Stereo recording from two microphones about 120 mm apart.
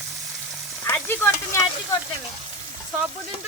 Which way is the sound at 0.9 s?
20° left (ahead or behind).